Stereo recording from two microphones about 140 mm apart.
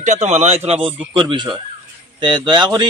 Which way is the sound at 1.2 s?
35° right (ahead or behind).